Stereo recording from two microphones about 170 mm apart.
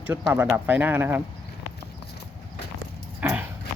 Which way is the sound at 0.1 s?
15° right (ahead or behind).